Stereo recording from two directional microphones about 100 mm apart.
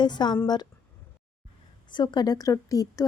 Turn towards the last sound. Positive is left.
turn(degrees=35)  # may be behind; listen again after turning